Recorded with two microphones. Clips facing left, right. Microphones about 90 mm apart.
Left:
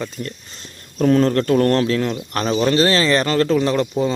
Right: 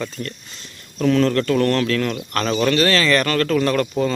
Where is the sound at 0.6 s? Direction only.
40° left (ahead or behind).